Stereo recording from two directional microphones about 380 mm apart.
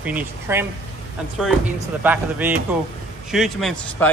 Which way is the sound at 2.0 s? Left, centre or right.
Centre.